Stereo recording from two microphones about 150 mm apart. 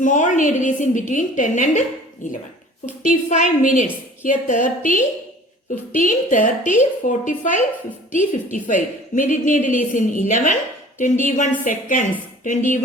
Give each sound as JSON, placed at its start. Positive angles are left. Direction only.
{"t": 0.0, "sound": "a woman's voice", "side_deg": 55}